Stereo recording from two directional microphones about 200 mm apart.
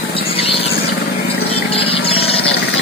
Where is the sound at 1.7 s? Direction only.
25° left (ahead or behind).